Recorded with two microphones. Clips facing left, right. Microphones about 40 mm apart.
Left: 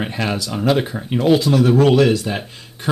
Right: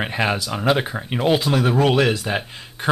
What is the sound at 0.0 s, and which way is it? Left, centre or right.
Speech, centre.